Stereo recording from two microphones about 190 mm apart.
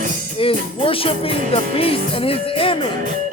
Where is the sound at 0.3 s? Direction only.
30° left (ahead or behind).